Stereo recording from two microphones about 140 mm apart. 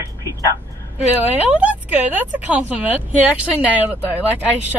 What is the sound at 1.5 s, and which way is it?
Speech, 10° right (ahead or behind).